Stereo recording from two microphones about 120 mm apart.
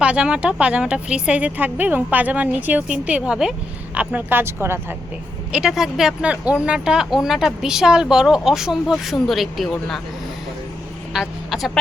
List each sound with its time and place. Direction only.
0.0 s speech: 10° right (ahead or behind)
5.5 s speech: 5° right (ahead or behind)
11.1 s a woman's voice: centre (ahead or behind)